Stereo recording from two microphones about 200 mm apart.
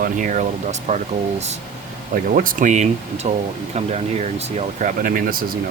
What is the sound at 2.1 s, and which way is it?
Speech, 45° right (ahead or behind).